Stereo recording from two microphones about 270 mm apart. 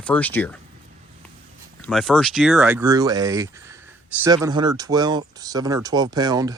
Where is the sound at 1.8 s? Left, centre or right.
Centre.